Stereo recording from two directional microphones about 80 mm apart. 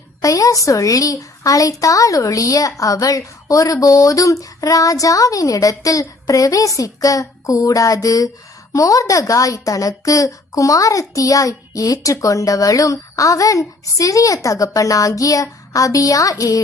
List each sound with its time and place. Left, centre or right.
0.2 s a woman's voice: left